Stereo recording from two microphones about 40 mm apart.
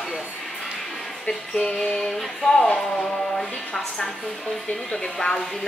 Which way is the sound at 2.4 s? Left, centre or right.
Centre.